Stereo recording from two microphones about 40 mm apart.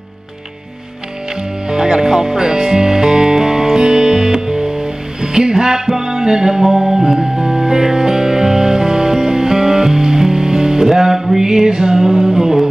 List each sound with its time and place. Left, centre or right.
1.7 s music: centre